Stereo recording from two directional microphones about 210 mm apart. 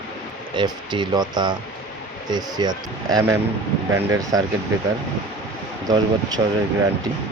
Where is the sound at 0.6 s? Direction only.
20° right (ahead or behind).